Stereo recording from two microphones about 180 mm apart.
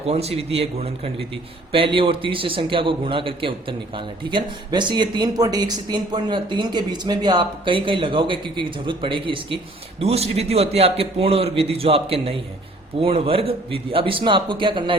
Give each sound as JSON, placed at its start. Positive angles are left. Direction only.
{"t": 0.1, "sound": "a man's voice", "side_deg": -35}